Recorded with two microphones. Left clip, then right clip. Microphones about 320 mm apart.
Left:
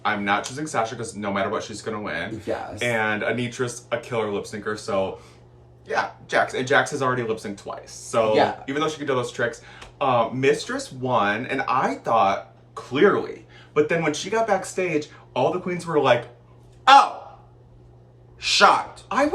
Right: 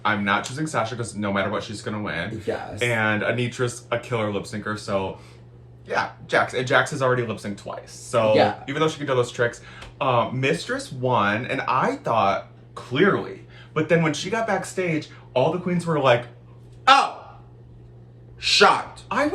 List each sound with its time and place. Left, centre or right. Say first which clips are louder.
0.0 s speech: right 1 dB; centre
18.3 s speech: even; centre
19.1 s speech: left 2 dB; centre